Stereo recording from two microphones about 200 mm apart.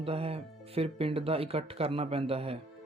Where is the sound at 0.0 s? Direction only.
30° right (ahead or behind).